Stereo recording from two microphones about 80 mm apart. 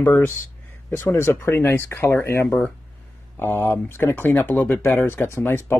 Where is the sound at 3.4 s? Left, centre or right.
Left.